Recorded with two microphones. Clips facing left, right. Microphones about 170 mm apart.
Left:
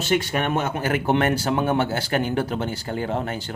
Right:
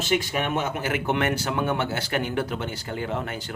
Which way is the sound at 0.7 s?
35° left (ahead or behind).